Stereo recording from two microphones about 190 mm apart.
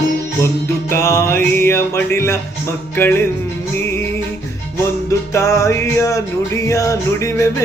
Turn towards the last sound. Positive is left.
turn(degrees=15)  # may be behind; listen again after turning